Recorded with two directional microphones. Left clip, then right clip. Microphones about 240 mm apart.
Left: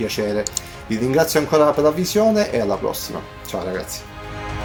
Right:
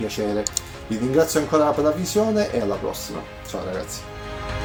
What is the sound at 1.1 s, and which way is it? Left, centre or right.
Speech, left.